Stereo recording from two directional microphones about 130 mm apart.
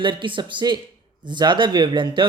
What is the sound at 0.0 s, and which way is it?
A man's voice, 40° right (ahead or behind).